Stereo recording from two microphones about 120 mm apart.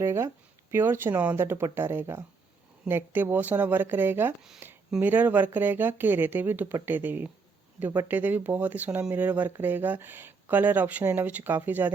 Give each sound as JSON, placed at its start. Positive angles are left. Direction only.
{"t": 0.0, "sound": "speech", "side_deg": -20}